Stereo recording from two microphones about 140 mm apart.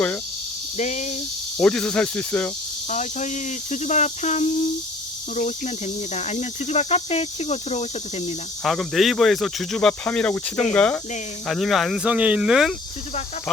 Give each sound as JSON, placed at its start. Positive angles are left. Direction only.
{"t": 0.8, "sound": "speech", "side_deg": 55}
{"t": 1.5, "sound": "cricket", "side_deg": 5}
{"t": 2.9, "sound": "speech", "side_deg": 60}
{"t": 8.6, "sound": "speech", "side_deg": 0}